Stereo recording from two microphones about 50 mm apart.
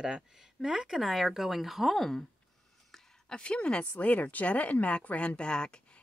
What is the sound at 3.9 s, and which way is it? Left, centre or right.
Speech, left.